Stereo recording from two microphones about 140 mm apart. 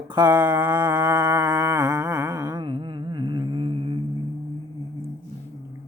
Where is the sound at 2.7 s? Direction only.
35° right (ahead or behind).